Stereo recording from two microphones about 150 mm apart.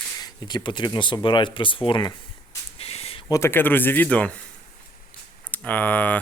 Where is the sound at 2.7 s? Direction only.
40° left (ahead or behind).